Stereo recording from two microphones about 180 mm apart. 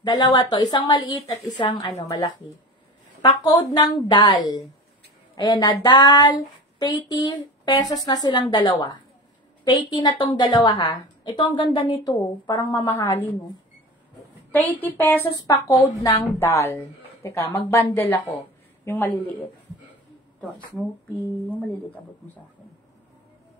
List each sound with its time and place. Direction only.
0.0 s a woman's voice: 25° left (ahead or behind)
14.5 s a woman's voice: 10° left (ahead or behind)
20.3 s speech: 5° left (ahead or behind)